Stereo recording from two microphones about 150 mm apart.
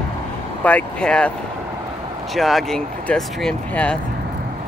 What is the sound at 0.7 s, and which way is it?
Speech, 10° left (ahead or behind).